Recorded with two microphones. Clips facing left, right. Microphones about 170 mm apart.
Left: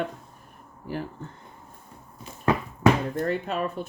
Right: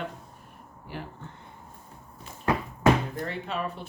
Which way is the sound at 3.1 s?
45° left (ahead or behind).